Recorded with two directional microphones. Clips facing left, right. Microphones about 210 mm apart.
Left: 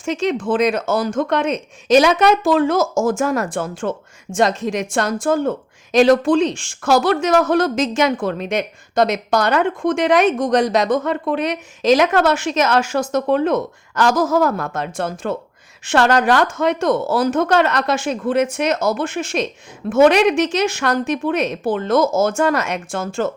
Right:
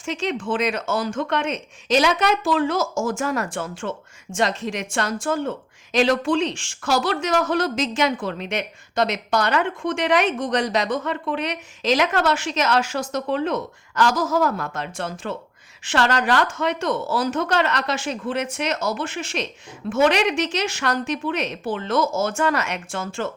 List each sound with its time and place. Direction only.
0.0 s speech: 45° left (ahead or behind)